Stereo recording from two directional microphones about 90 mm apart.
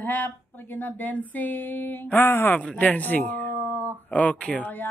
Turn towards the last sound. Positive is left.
turn(degrees=20)  # may be behind; listen again after turning